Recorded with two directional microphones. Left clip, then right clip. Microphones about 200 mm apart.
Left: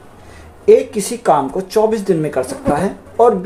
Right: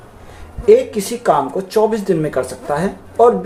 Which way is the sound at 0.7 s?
20° left (ahead or behind).